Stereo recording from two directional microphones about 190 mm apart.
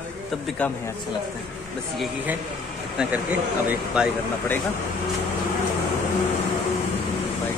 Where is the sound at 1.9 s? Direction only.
10° right (ahead or behind).